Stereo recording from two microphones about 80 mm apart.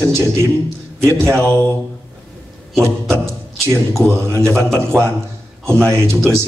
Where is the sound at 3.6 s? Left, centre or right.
Right.